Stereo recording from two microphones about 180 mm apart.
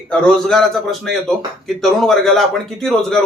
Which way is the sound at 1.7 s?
Centre (ahead or behind).